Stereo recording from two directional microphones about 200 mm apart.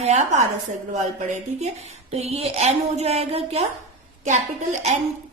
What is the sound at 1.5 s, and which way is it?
Speech, 35° right (ahead or behind).